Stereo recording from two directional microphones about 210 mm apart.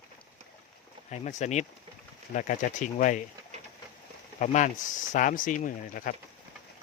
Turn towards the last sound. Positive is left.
turn(degrees=40)  # may be behind; listen again after turning